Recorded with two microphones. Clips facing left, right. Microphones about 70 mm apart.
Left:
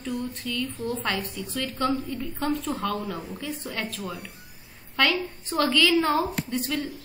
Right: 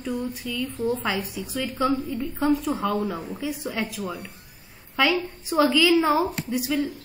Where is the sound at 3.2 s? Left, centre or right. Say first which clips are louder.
Right 4 dB; centre.